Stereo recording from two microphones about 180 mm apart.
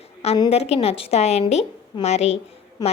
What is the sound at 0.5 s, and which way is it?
A woman's voice, 35° left (ahead or behind).